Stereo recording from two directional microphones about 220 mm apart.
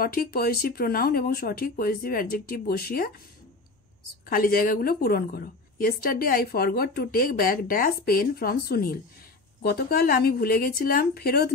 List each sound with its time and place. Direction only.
0.0 s a woman's voice: 40° left (ahead or behind)
4.3 s a woman's voice: 40° left (ahead or behind)